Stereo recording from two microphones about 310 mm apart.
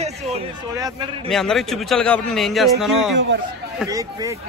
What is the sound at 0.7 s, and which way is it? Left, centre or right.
Speech, centre.